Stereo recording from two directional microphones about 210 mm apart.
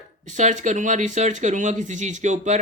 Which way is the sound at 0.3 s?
35° right (ahead or behind).